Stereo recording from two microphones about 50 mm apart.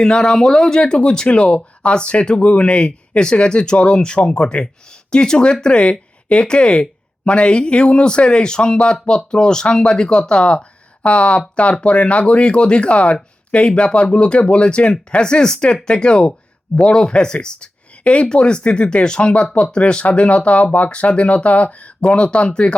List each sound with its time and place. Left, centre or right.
0.0 s speech: centre